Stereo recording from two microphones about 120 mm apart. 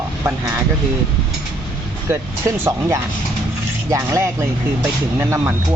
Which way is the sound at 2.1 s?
20° right (ahead or behind).